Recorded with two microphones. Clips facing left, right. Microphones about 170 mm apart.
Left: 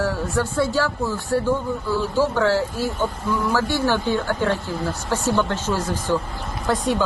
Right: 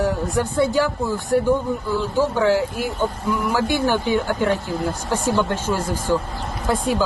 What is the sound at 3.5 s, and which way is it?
Speech, 15° right (ahead or behind).